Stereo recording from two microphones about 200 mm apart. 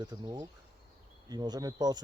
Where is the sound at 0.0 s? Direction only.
20° right (ahead or behind).